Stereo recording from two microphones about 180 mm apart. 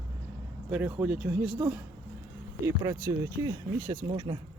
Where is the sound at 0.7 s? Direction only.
10° right (ahead or behind).